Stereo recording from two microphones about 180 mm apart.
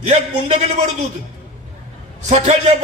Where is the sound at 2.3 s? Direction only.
40° right (ahead or behind).